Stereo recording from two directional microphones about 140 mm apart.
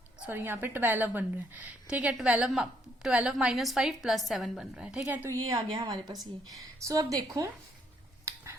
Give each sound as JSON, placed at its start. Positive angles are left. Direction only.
{"t": 0.3, "sound": "a woman's voice", "side_deg": -15}
{"t": 5.0, "sound": "a woman's voice", "side_deg": -20}